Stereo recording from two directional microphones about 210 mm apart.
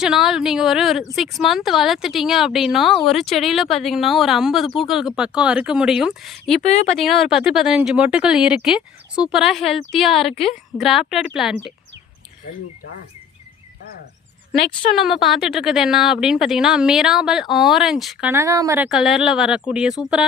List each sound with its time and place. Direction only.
0.0 s speech: 5° right (ahead or behind)
6.6 s speech: 35° left (ahead or behind)
7.0 s speech: centre (ahead or behind)
14.9 s speech: centre (ahead or behind)
18.9 s speech: centre (ahead or behind)